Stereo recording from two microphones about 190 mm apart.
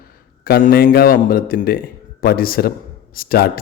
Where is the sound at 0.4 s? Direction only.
55° left (ahead or behind).